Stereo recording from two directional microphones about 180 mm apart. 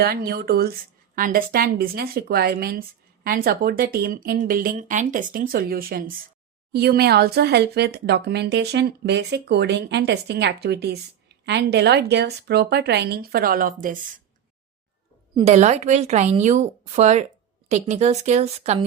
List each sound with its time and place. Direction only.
0.0 s speech: 55° right (ahead or behind)
15.4 s speech: 40° right (ahead or behind)